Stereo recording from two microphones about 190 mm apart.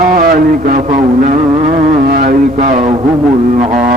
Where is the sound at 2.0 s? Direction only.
50° right (ahead or behind).